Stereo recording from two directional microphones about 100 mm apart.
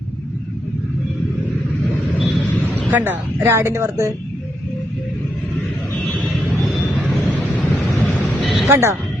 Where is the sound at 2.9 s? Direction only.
20° right (ahead or behind).